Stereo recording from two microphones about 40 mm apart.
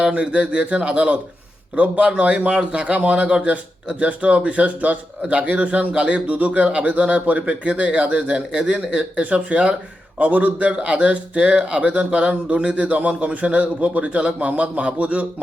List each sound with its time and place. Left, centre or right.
0.0 s a man's voice: right
7.7 s speech: right
9.2 s speech: right
10.2 s a man's voice: right